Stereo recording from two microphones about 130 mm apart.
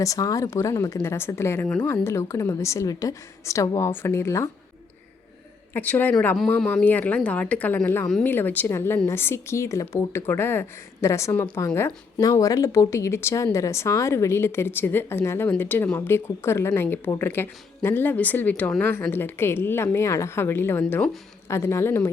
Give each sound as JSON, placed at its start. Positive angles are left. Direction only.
{"t": 0.0, "sound": "a woman's voice", "side_deg": 25}
{"t": 1.6, "sound": "a woman's voice", "side_deg": 5}
{"t": 1.9, "sound": "a woman's voice", "side_deg": 20}
{"t": 5.7, "sound": "a woman's voice", "side_deg": 15}